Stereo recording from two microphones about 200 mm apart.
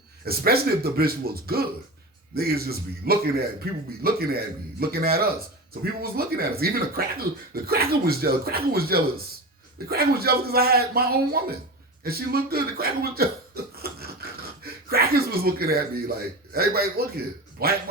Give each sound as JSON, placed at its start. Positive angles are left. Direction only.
{"t": 0.3, "sound": "speech", "side_deg": -50}